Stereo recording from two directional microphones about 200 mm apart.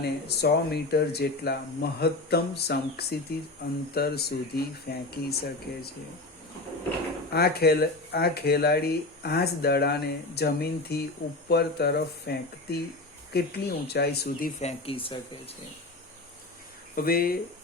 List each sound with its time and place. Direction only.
0.0 s speech: 55° left (ahead or behind)
7.3 s speech: 50° left (ahead or behind); by 15.5 s 30° left (ahead or behind)
16.9 s speech: 45° left (ahead or behind)